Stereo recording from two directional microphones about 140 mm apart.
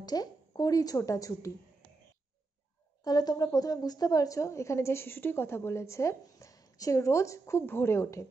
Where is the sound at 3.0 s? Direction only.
30° left (ahead or behind).